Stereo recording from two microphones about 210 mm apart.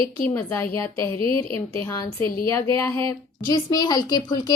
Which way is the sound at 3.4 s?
20° left (ahead or behind).